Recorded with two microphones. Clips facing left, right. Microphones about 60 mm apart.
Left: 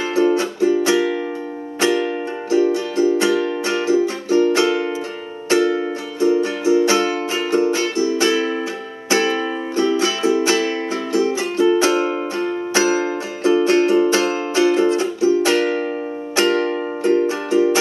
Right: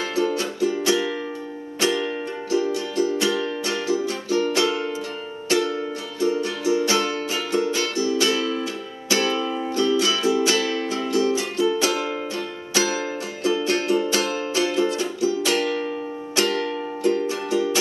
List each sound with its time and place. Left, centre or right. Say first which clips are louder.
0.1 s music: left 8 dB; left